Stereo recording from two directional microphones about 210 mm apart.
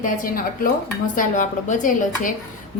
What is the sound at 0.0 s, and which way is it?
A woman's voice, 40° left (ahead or behind).